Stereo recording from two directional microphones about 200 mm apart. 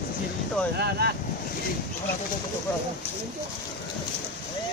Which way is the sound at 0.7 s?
55° right (ahead or behind).